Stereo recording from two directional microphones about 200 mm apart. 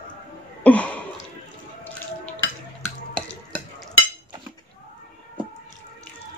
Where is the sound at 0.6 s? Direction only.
5° left (ahead or behind).